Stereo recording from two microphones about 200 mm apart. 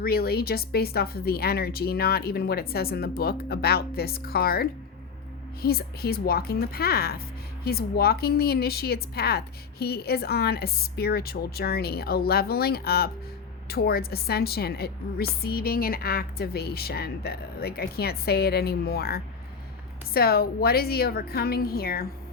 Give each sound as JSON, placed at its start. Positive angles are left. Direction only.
{"t": 0.0, "sound": "speech", "side_deg": 50}